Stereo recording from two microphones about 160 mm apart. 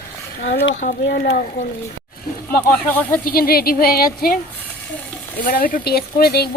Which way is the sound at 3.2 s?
65° left (ahead or behind).